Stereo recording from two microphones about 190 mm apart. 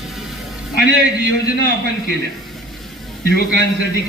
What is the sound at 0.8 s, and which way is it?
Speech, 50° left (ahead or behind).